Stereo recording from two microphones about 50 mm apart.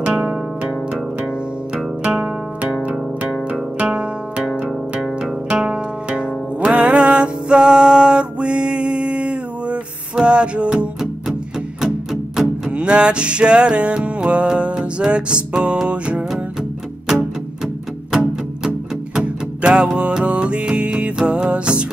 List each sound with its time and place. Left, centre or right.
0.0 s music: centre
2.1 s music: right
5.2 s music: centre
12.7 s music: right
19.1 s music: right